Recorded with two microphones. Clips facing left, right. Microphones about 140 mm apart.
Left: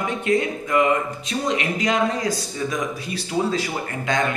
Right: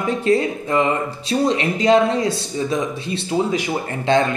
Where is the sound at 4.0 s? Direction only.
30° right (ahead or behind).